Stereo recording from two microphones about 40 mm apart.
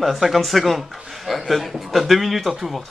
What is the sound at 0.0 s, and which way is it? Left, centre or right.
A man's voice, centre.